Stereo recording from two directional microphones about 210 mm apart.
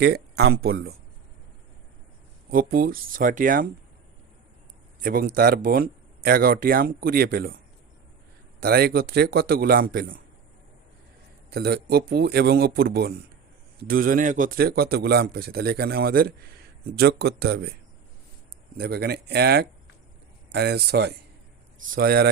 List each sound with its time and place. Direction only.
0.0 s speech: 50° right (ahead or behind)
2.5 s speech: 40° right (ahead or behind)
5.0 s speech: 45° right (ahead or behind)
8.6 s speech: 50° right (ahead or behind)
11.5 s speech: 50° right (ahead or behind)
18.8 s speech: 50° right (ahead or behind)